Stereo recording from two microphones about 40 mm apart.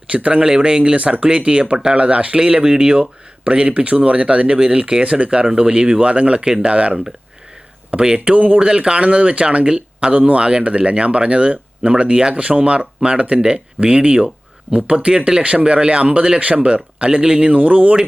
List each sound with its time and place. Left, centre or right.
0.1 s speech: right